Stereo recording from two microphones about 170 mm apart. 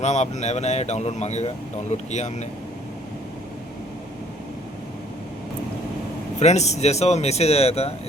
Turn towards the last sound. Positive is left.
turn(degrees=35)  # may be behind; listen again after turning